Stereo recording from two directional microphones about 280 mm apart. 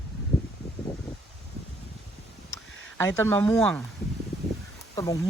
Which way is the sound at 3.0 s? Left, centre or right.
Centre.